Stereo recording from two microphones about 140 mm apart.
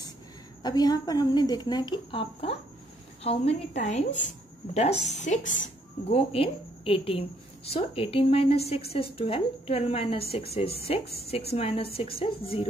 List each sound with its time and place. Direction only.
0.6 s a woman's voice: 30° left (ahead or behind)
3.3 s a woman's voice: 50° left (ahead or behind)
4.7 s a woman's voice: 50° left (ahead or behind)
6.0 s a woman's voice: 45° left (ahead or behind)